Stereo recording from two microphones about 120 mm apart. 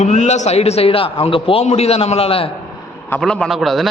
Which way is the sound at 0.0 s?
75° left (ahead or behind).